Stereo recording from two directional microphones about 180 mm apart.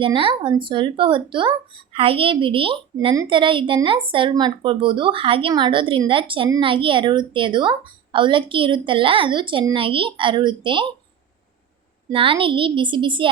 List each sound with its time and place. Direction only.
0.0 s speech: 30° right (ahead or behind)
12.1 s speech: 30° right (ahead or behind)